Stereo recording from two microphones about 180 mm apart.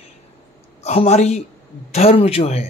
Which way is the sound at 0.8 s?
40° left (ahead or behind).